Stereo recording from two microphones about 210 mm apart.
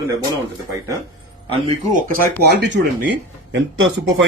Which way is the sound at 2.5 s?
55° right (ahead or behind).